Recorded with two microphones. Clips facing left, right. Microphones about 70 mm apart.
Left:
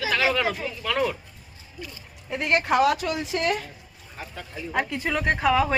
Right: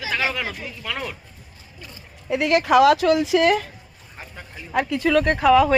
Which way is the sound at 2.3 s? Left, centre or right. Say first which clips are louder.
Right 5 dB; right.